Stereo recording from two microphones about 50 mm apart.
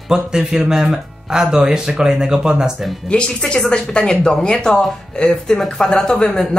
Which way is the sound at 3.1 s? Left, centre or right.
Centre.